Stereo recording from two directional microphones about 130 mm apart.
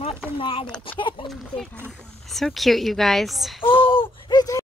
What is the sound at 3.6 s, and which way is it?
Speech, 40° left (ahead or behind).